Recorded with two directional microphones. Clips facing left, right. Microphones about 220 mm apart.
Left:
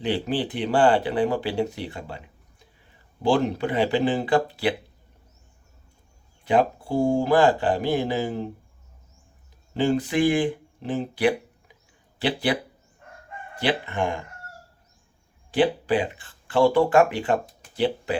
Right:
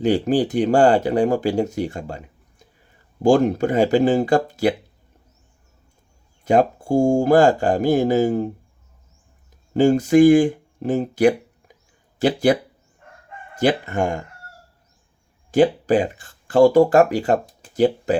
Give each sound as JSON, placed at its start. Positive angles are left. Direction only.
{"t": 0.0, "sound": "speech", "side_deg": -45}
{"t": 6.4, "sound": "speech", "side_deg": -45}
{"t": 9.7, "sound": "speech", "side_deg": -45}
{"t": 13.6, "sound": "speech", "side_deg": -45}
{"t": 15.5, "sound": "speech", "side_deg": -45}